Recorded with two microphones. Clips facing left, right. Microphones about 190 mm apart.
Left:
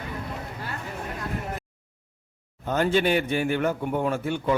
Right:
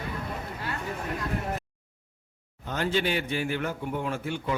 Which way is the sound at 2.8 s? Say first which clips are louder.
Left 5 dB; 50° left (ahead or behind).